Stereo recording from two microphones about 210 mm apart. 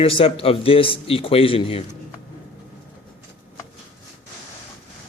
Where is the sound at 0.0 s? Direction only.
25° left (ahead or behind).